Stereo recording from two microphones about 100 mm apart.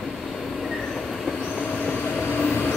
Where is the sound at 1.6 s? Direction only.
10° left (ahead or behind).